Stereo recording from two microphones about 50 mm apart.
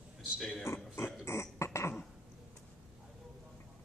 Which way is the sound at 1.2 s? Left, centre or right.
Left.